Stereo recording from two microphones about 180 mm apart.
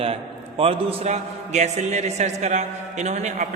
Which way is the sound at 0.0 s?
30° right (ahead or behind).